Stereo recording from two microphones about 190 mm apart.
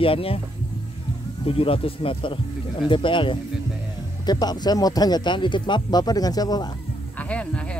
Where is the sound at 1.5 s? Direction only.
30° left (ahead or behind).